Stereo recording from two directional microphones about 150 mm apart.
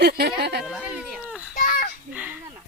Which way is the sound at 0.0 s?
90° right.